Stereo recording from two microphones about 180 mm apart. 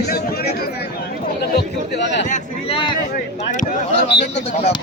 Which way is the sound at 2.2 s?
45° left (ahead or behind).